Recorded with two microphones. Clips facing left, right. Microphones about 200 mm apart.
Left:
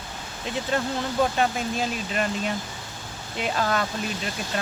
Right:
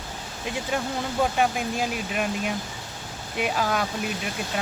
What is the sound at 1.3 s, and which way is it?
Speech, 10° right (ahead or behind).